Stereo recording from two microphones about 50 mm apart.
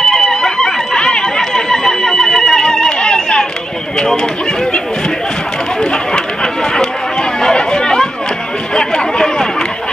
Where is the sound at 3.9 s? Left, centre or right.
Centre.